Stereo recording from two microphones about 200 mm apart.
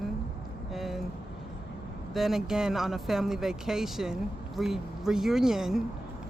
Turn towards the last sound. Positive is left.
turn(degrees=0)  # may be behind; listen again after turning